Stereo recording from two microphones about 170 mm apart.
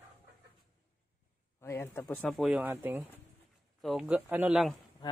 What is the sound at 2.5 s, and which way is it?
Speech, 10° right (ahead or behind).